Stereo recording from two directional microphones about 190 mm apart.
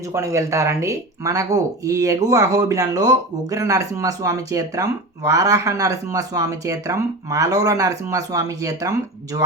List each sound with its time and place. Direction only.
0.1 s speech: 15° right (ahead or behind)